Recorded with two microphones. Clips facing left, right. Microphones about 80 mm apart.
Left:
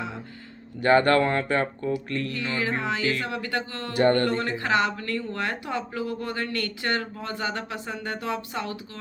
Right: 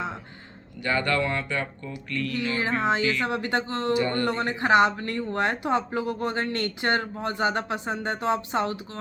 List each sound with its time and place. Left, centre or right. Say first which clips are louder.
0.8 s speech: left 6 dB; left
2.6 s speech: right 3 dB; right
3.9 s speech: left 6 dB; left
4.3 s speech: right 3 dB; right